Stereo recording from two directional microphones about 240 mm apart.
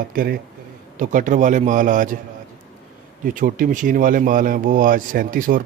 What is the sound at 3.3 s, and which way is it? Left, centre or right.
A man's voice, right.